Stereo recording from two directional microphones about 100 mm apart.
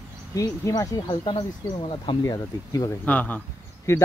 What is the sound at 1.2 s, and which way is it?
Speech, 55° left (ahead or behind).